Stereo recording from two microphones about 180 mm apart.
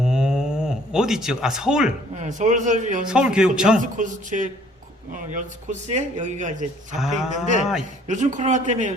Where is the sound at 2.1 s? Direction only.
40° right (ahead or behind).